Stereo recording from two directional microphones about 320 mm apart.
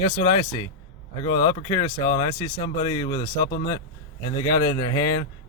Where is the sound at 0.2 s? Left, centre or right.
Centre.